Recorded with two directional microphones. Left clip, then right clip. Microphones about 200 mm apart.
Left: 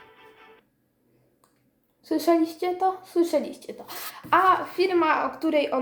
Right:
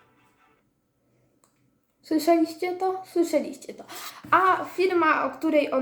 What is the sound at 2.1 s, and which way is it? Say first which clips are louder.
Speech: right 1 dB; 5° left (ahead or behind).